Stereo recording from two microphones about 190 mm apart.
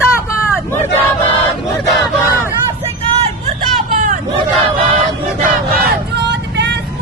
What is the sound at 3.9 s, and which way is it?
Hubbub, 45° right (ahead or behind).